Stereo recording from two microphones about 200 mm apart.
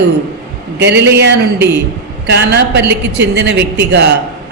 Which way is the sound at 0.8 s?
60° right (ahead or behind).